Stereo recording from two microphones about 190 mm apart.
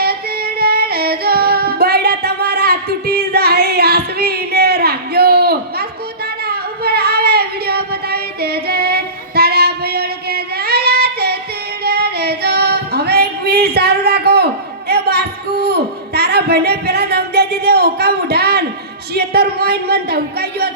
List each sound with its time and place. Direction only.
0.0 s female singing: 55° right (ahead or behind)
6.5 s singing: 55° right (ahead or behind)
11.8 s female singing: 55° right (ahead or behind)
19.1 s a sound: 55° right (ahead or behind)